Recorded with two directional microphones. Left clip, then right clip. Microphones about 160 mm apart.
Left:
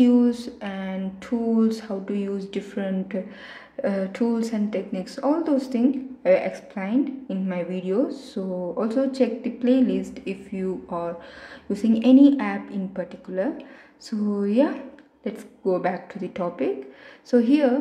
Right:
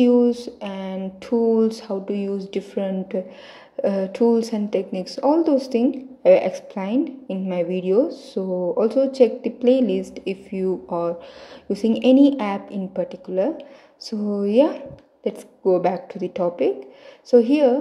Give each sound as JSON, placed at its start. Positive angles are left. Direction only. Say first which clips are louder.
{"t": 0.0, "sound": "speech", "louder": "right 3 dB", "side_deg": -15}